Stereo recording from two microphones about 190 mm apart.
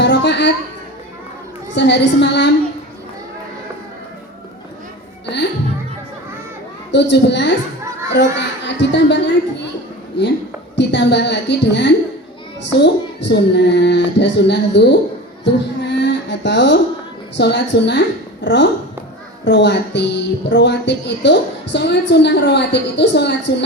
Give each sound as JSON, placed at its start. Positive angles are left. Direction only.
{"t": 0.0, "sound": "a sound", "side_deg": 65}
{"t": 1.7, "sound": "speech", "side_deg": 65}
{"t": 6.9, "sound": "a child's voice", "side_deg": 65}
{"t": 10.8, "sound": "a woman's voice", "side_deg": 65}